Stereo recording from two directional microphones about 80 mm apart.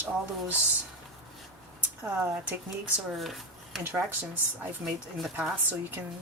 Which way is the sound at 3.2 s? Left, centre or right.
Centre.